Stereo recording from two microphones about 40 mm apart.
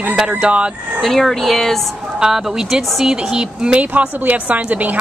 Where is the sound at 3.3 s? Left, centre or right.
Right.